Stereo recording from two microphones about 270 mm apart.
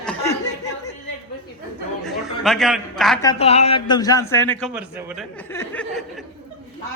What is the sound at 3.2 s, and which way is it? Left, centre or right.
A man's voice, centre.